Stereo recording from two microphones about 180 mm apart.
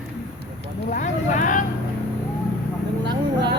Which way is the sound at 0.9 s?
45° left (ahead or behind).